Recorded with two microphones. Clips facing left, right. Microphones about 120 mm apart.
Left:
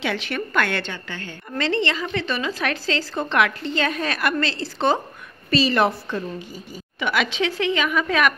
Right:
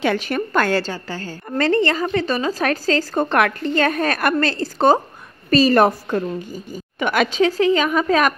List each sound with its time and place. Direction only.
0.0 s a woman's voice: 45° right (ahead or behind)